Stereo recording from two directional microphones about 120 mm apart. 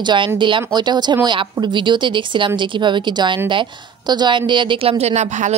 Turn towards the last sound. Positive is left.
turn(degrees=-80)